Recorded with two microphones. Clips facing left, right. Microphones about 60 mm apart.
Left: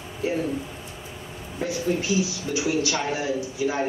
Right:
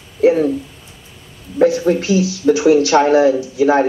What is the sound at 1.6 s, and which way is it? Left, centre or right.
Speech, right.